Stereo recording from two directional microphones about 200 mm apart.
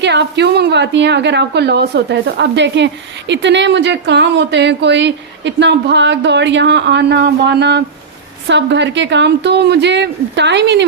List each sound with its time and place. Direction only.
0.0 s a woman's voice: 60° right (ahead or behind)